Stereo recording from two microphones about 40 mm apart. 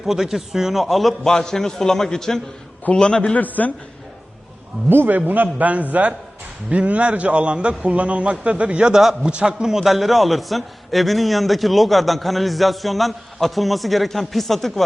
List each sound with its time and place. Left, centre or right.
0.0 s a man's voice: centre
1.3 s a man's voice: centre
2.9 s a man's voice: left
3.3 s a man's voice: left
4.9 s a man's voice: right
8.9 s a man's voice: centre
9.2 s a man's voice: right
9.6 s a man's voice: centre